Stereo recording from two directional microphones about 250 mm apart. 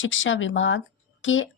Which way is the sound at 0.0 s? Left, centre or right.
Left.